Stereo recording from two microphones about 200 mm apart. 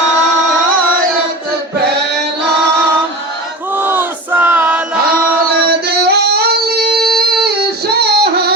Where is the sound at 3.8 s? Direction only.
10° right (ahead or behind).